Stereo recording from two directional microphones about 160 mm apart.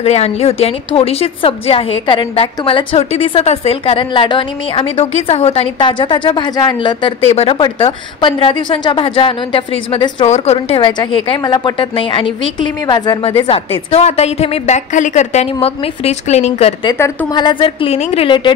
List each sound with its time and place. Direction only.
0.0 s a woman's voice: 40° left (ahead or behind)
10.2 s a woman's voice: 45° left (ahead or behind)
17.0 s a woman's voice: 25° left (ahead or behind)